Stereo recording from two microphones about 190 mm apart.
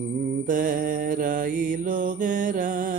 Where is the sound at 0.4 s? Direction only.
45° right (ahead or behind).